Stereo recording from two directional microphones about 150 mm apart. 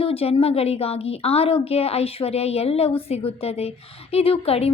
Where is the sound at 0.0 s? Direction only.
40° left (ahead or behind).